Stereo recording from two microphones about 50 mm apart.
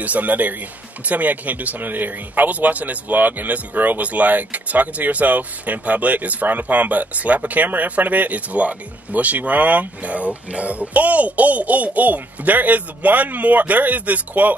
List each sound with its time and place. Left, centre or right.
0.0 s speech: right